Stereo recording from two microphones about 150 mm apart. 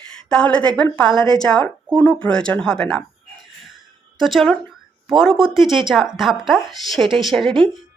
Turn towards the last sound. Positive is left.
turn(degrees=0)  # may be behind; listen again after turning